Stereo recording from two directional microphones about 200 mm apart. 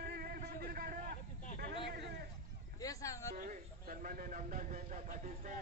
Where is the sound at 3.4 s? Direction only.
40° right (ahead or behind).